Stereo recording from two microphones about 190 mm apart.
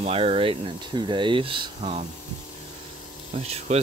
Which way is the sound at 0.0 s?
30° right (ahead or behind).